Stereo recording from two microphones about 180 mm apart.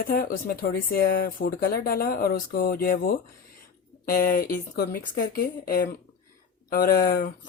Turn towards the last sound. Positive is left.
turn(degrees=55)  # may be behind; listen again after turning